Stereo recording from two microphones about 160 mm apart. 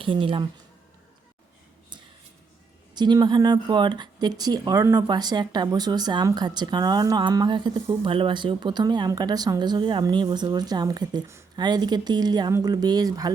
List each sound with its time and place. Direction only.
0.0 s speech: 35° right (ahead or behind)
2.9 s speech: 25° right (ahead or behind)